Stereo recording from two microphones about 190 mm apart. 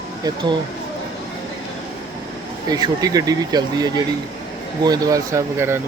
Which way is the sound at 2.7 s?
20° right (ahead or behind).